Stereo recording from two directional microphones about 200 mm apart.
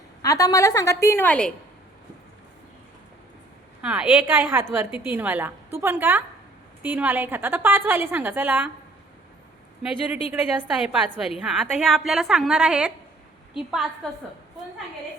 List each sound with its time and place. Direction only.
0.2 s a woman's voice: 15° left (ahead or behind)
3.8 s a woman's voice: 5° right (ahead or behind)
10.2 s a woman's voice: 30° left (ahead or behind)
10.8 s a woman's voice: centre (ahead or behind)